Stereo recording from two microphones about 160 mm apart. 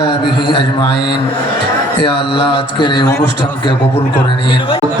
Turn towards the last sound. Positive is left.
turn(degrees=30)  # may be behind; listen again after turning